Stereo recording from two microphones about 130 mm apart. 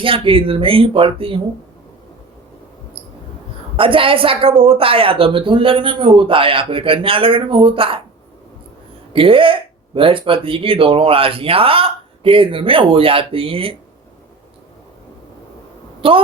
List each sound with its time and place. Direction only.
0.0 s speech: 45° right (ahead or behind)
3.8 s speech: 45° right (ahead or behind)
9.1 s speech: 45° right (ahead or behind)
16.0 s a woman's voice: 45° right (ahead or behind)